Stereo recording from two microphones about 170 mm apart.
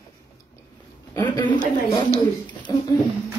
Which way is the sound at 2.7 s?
25° left (ahead or behind).